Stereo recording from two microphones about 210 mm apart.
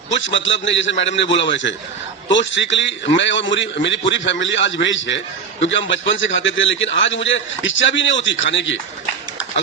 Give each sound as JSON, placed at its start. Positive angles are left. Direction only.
{"t": 0.2, "sound": "a man's voice", "side_deg": 60}